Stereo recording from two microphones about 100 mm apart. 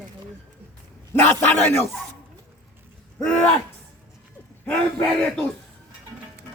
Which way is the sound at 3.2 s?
10° left (ahead or behind).